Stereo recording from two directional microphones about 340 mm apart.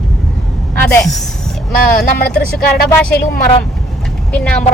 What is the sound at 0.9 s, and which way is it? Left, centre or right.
Speech, centre.